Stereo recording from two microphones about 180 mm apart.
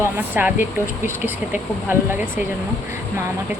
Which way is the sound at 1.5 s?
10° right (ahead or behind).